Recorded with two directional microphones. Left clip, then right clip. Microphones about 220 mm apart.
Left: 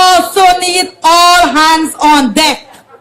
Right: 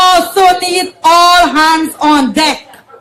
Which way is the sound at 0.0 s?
35° left (ahead or behind).